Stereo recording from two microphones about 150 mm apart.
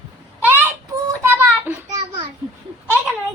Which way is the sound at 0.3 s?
15° right (ahead or behind).